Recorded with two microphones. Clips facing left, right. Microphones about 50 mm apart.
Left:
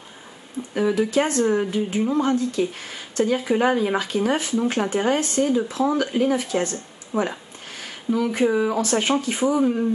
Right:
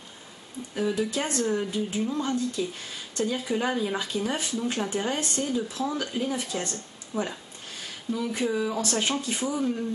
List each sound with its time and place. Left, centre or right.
0.7 s speech: left
7.7 s speech: left